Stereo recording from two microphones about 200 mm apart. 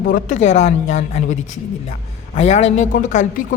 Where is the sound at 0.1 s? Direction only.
40° left (ahead or behind).